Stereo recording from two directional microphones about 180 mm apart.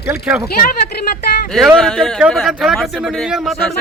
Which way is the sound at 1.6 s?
Centre (ahead or behind).